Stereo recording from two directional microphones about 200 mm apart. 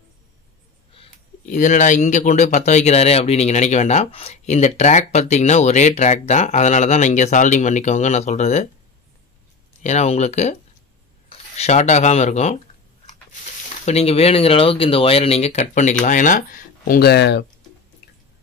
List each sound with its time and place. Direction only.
0.9 s speech: 40° left (ahead or behind)
9.8 s speech: 35° left (ahead or behind)
13.8 s speech: 30° left (ahead or behind); by 17.5 s 60° left (ahead or behind)